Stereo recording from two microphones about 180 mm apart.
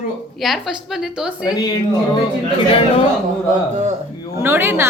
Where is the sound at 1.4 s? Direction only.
20° left (ahead or behind).